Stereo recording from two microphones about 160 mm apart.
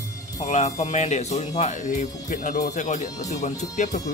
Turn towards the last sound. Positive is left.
turn(degrees=50)  # may be behind; listen again after turning